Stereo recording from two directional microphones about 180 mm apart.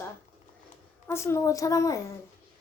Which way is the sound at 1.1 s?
15° left (ahead or behind).